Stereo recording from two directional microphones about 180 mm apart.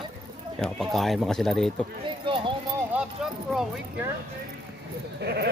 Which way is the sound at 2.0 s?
30° right (ahead or behind).